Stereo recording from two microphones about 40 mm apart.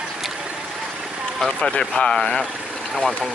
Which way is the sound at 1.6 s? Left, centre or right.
Left.